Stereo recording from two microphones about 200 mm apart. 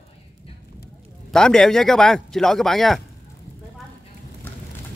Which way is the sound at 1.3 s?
5° left (ahead or behind).